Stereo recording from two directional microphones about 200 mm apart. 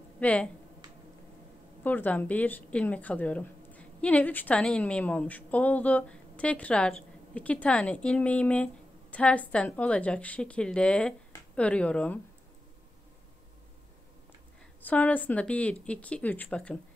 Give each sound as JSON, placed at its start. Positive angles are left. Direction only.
{"t": 0.2, "sound": "speech", "side_deg": 5}
{"t": 1.8, "sound": "a woman's voice", "side_deg": 10}
{"t": 14.8, "sound": "a woman's voice", "side_deg": 10}